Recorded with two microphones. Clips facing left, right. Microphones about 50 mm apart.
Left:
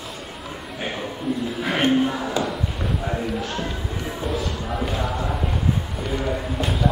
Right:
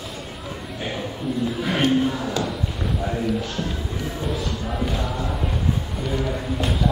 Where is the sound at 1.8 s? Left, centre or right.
Centre.